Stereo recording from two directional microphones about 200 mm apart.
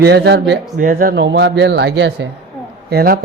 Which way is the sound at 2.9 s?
50° right (ahead or behind).